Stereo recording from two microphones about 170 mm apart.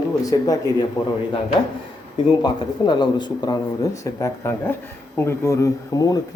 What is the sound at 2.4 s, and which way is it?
Speech, 25° left (ahead or behind).